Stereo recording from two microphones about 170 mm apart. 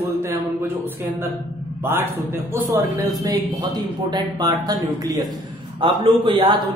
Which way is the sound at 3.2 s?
25° right (ahead or behind).